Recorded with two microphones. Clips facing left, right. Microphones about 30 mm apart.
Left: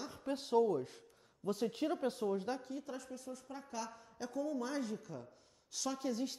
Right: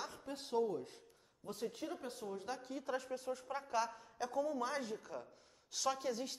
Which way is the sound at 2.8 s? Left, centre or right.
Right.